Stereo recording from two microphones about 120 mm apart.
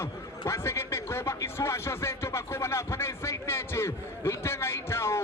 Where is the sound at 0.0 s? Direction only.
20° left (ahead or behind).